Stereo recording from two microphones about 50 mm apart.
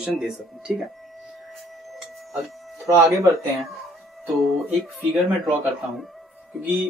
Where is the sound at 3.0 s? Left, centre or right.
Right.